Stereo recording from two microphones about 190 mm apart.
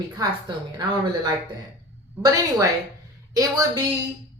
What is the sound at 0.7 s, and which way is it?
A woman's voice, 20° right (ahead or behind).